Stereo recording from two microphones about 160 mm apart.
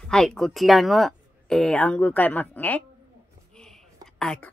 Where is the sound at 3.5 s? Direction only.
5° left (ahead or behind).